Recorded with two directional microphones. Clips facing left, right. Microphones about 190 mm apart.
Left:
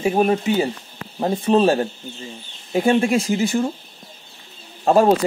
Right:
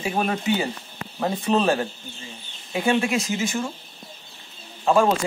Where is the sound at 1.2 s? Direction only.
30° left (ahead or behind).